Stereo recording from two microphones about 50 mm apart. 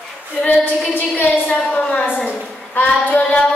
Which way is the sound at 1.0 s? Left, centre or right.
Left.